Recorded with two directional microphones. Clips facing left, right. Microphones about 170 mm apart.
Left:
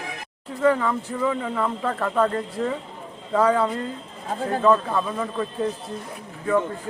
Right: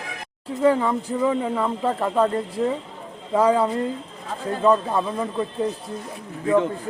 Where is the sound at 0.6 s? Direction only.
20° right (ahead or behind).